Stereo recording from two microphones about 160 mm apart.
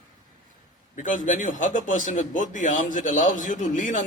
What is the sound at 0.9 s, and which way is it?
A man's voice, 55° left (ahead or behind).